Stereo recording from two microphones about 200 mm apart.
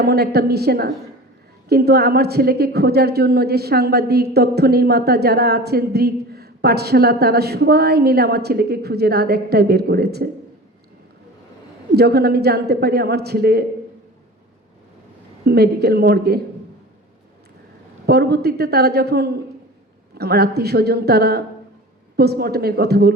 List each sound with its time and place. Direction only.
0.0 s a woman's voice: 55° right (ahead or behind)
11.9 s a woman's voice: 55° right (ahead or behind)
15.4 s a woman's voice: 50° right (ahead or behind)
18.0 s a woman's voice: 55° right (ahead or behind)